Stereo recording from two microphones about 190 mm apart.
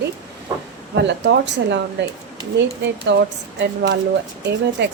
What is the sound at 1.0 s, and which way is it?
A woman's voice, 65° right (ahead or behind).